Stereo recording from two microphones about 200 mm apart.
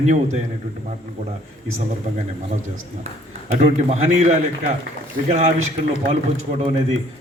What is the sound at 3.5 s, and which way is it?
A man's voice, 30° right (ahead or behind).